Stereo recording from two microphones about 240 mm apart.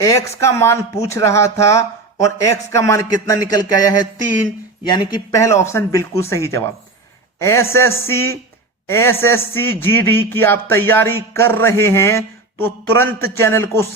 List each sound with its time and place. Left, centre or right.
0.0 s a man's voice: centre